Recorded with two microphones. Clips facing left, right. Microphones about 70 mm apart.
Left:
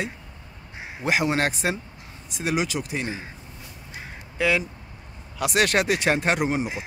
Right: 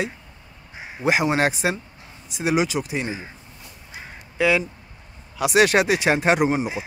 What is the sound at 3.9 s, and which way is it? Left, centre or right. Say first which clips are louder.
Quack: right 1 dB; centre.